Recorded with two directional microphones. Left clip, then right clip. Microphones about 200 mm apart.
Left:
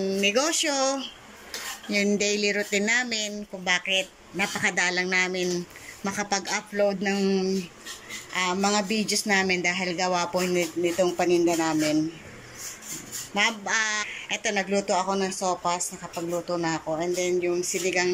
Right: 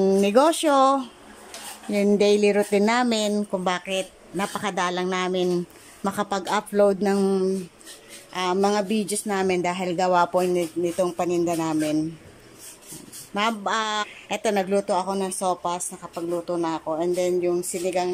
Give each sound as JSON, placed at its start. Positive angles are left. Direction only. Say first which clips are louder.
{"t": 0.0, "sound": "speech", "louder": "right 6 dB", "side_deg": -25}
{"t": 4.0, "sound": "speech", "louder": "even", "side_deg": -10}
{"t": 13.3, "sound": "speech", "louder": "right 1 dB", "side_deg": -20}
{"t": 16.0, "sound": "speech", "louder": "right 2 dB", "side_deg": -10}
{"t": 17.0, "sound": "speech", "louder": "right 4 dB", "side_deg": -25}